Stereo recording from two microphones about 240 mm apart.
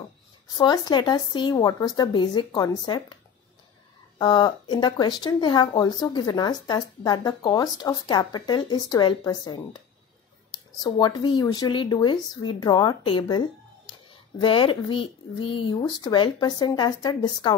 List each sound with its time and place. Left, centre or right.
0.5 s speech: centre
4.2 s speech: centre
10.8 s speech: centre
14.4 s speech: left